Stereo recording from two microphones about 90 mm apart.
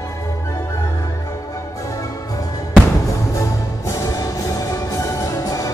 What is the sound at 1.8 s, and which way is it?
Music, 40° left (ahead or behind).